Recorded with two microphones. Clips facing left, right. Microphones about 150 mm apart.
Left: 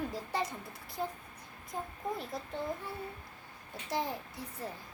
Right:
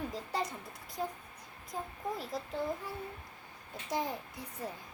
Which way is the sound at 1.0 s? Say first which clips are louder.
Even; centre (ahead or behind).